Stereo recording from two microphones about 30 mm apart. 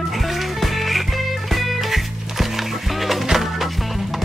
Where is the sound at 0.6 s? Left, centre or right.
Centre.